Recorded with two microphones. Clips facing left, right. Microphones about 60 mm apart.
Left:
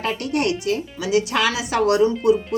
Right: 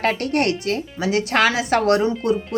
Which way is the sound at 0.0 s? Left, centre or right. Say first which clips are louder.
Right 2 dB; right.